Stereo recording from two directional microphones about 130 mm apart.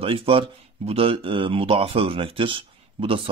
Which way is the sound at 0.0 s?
45° right (ahead or behind).